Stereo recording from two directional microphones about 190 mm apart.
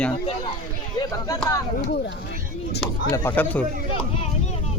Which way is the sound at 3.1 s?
10° left (ahead or behind).